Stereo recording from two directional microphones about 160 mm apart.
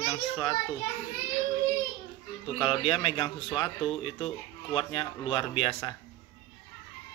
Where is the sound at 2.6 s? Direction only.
30° left (ahead or behind).